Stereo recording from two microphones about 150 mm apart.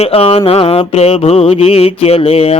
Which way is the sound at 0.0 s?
40° left (ahead or behind).